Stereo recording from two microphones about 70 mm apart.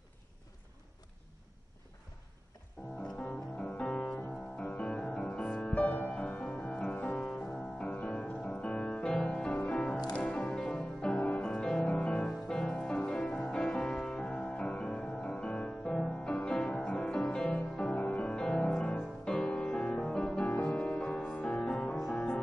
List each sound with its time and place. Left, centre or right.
2.8 s music: centre
22.1 s music: centre